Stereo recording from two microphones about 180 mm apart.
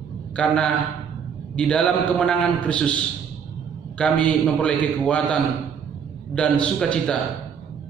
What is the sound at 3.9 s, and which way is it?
A man's voice, 5° left (ahead or behind).